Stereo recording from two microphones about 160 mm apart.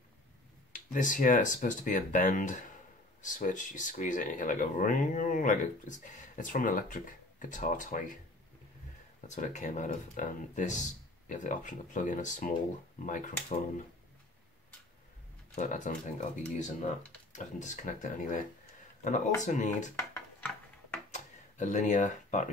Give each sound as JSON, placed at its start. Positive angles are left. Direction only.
{"t": 0.7, "sound": "speech", "side_deg": 55}
{"t": 9.3, "sound": "speech", "side_deg": 50}
{"t": 15.5, "sound": "speech", "side_deg": 55}
{"t": 21.1, "sound": "a sound", "side_deg": 50}